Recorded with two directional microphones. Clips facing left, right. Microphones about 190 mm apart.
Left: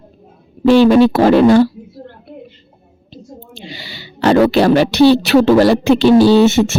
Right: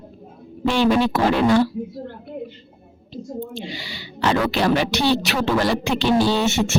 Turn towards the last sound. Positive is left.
turn(degrees=35)  # may be behind; listen again after turning